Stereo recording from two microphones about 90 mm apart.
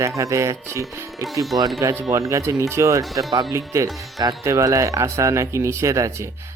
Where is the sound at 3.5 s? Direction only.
35° right (ahead or behind).